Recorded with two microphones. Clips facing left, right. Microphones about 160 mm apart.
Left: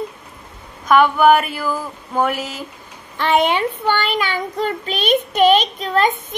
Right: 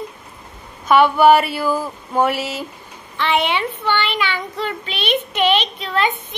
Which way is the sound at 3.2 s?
45° left (ahead or behind).